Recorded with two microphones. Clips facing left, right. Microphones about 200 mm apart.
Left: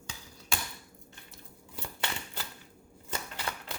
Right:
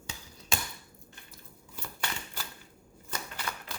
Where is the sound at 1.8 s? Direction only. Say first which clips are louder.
Left 1 dB; 25° left (ahead or behind).